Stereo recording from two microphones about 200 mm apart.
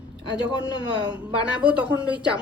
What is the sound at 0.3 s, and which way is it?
Speech, 25° left (ahead or behind).